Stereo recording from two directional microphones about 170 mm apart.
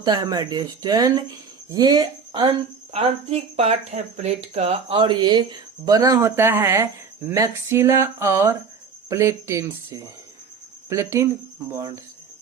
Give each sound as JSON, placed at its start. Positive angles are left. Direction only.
{"t": 0.0, "sound": "speech", "side_deg": -20}
{"t": 2.9, "sound": "speech", "side_deg": -35}